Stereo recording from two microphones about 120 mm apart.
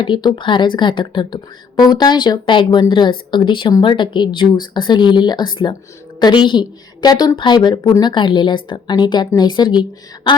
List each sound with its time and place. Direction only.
0.0 s a woman's voice: 40° left (ahead or behind)